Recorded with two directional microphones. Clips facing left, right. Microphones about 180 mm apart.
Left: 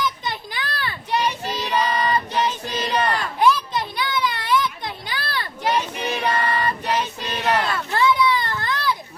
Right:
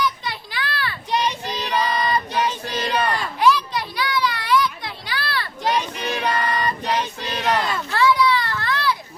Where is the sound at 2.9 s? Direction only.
10° right (ahead or behind).